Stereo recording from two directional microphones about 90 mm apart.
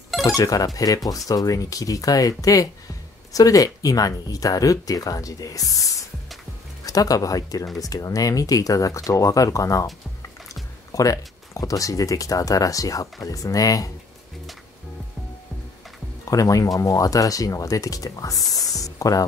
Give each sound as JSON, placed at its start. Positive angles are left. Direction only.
{"t": 0.4, "sound": "speech", "side_deg": 40}
{"t": 16.3, "sound": "speech", "side_deg": 40}